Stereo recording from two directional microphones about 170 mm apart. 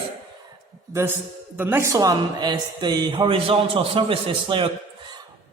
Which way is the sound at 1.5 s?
15° right (ahead or behind).